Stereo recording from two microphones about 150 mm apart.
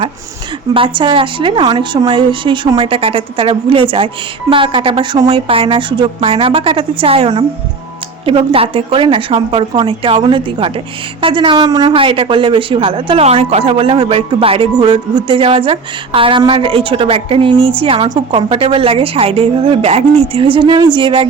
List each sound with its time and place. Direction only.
0.7 s speech: 35° right (ahead or behind)